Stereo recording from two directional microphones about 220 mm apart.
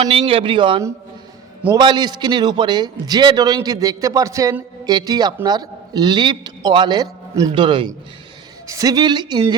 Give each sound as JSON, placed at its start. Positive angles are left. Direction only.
{"t": 0.1, "sound": "a man's voice", "side_deg": -25}